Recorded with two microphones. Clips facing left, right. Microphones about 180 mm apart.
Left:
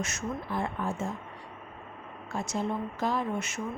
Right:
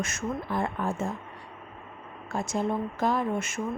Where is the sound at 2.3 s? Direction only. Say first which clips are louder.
Right 3 dB; 50° right (ahead or behind).